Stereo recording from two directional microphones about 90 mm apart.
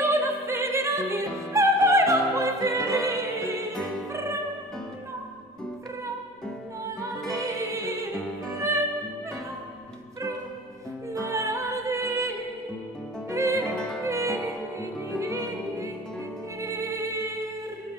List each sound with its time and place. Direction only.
0.0 s opera: 25° right (ahead or behind)
7.6 s music: 35° right (ahead or behind)
11.1 s music: 35° right (ahead or behind)
13.7 s music: 10° left (ahead or behind)
14.0 s music: 35° right (ahead or behind)